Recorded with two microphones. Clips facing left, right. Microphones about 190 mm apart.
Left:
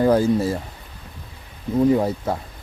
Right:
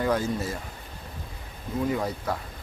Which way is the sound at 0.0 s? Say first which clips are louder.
Left 9 dB; 35° left (ahead or behind).